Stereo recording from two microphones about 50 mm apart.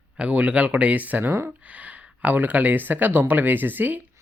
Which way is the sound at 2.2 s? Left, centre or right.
Right.